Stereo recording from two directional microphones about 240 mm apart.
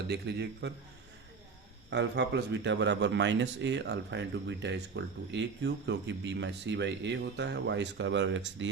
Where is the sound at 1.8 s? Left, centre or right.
Right.